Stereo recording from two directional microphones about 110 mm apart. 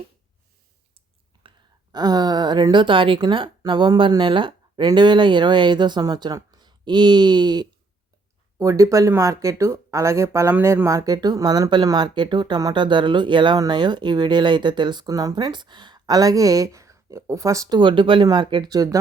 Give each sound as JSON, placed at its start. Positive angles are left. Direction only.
{"t": 1.5, "sound": "a woman's voice", "side_deg": -40}
{"t": 8.5, "sound": "speech", "side_deg": -30}
{"t": 17.7, "sound": "speech", "side_deg": -50}